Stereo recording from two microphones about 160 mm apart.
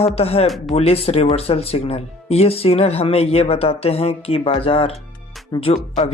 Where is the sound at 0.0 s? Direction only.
40° left (ahead or behind).